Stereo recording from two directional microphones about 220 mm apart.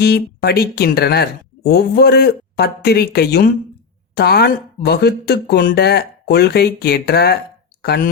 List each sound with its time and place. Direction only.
0.0 s speech: 45° left (ahead or behind)